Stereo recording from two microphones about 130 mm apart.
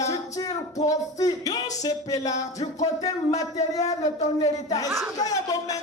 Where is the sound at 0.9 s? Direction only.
30° left (ahead or behind).